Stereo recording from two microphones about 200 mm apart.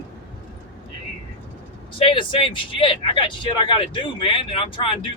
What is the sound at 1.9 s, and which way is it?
Speech, 25° left (ahead or behind).